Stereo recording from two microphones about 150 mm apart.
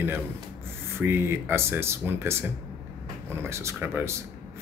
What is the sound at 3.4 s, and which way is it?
Speech, 20° right (ahead or behind).